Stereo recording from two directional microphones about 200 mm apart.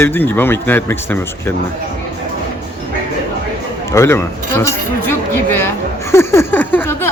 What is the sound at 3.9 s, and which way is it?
A man's voice, 15° left (ahead or behind).